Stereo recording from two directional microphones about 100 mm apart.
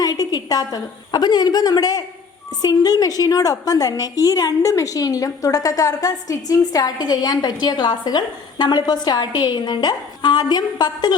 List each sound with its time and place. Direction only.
0.0 s a woman's voice: 40° left (ahead or behind)